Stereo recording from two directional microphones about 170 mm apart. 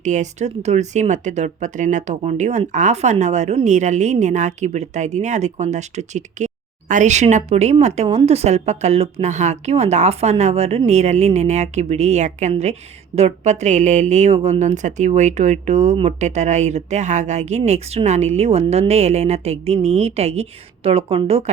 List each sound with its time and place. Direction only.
0.0 s a woman's voice: 45° right (ahead or behind)